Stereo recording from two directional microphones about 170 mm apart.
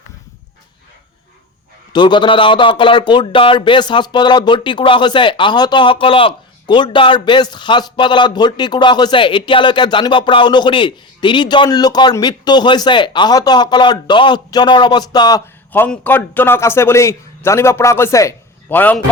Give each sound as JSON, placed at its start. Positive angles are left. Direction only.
{"t": 1.9, "sound": "speech", "side_deg": 25}